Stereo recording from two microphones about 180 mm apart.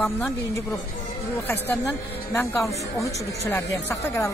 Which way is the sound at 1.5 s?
10° left (ahead or behind).